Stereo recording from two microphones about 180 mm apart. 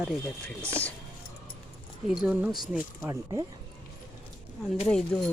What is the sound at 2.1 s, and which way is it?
Speech, 5° right (ahead or behind).